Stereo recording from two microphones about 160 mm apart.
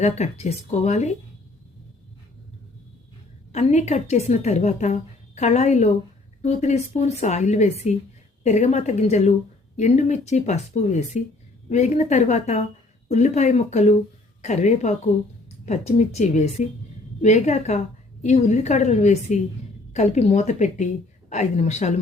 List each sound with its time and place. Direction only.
0.0 s a woman's voice: 40° left (ahead or behind)
3.5 s a woman's voice: 45° left (ahead or behind)